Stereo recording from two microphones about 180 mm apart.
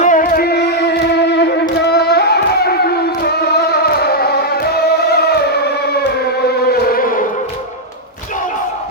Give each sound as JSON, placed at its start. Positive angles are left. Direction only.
{"t": 0.0, "sound": "music", "side_deg": 50}
{"t": 6.7, "sound": "insect", "side_deg": 60}